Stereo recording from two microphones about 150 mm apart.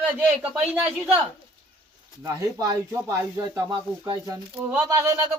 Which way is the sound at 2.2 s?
25° right (ahead or behind).